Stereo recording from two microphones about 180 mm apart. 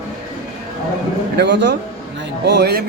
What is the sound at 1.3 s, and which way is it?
A man's voice, 70° right (ahead or behind).